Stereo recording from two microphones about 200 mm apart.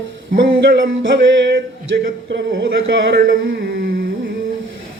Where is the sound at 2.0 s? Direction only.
50° right (ahead or behind).